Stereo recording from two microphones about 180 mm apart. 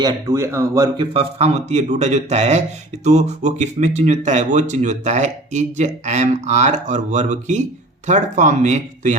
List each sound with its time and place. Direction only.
0.0 s a man's voice: 20° right (ahead or behind); by 9.1 s 40° right (ahead or behind)